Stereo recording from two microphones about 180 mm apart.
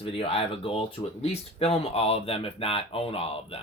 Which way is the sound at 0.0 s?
30° left (ahead or behind).